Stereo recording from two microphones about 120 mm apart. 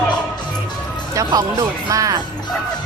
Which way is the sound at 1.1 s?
30° right (ahead or behind).